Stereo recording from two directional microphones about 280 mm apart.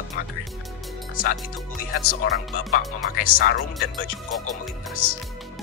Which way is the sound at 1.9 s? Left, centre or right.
Left.